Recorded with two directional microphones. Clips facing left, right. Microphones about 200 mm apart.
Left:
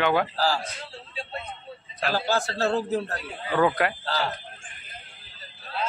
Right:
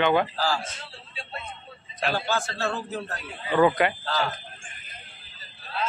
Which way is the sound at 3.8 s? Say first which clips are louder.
Right 1 dB; centre (ahead or behind).